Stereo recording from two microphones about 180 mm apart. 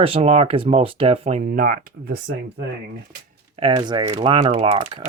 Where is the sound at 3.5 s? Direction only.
30° right (ahead or behind).